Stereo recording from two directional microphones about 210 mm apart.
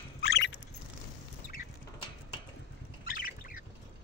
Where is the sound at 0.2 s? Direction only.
55° left (ahead or behind).